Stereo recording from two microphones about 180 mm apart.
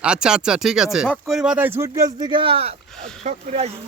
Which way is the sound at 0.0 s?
5° right (ahead or behind).